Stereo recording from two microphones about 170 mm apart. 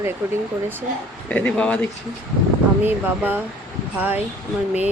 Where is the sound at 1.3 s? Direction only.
10° left (ahead or behind).